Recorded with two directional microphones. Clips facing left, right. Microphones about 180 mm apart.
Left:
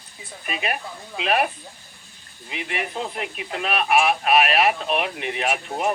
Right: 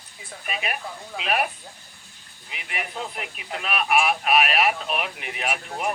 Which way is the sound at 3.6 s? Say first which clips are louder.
Left 3 dB; 35° left (ahead or behind).